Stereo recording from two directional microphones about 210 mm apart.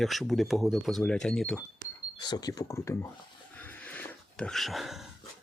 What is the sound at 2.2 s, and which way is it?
Speech, 20° left (ahead or behind).